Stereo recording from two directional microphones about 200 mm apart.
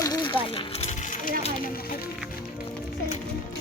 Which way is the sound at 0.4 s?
30° left (ahead or behind).